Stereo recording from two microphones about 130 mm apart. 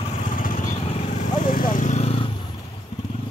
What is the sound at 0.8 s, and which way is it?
Vehicle, 55° left (ahead or behind).